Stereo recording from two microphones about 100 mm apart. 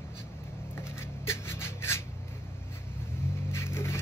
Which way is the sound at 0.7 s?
25° left (ahead or behind).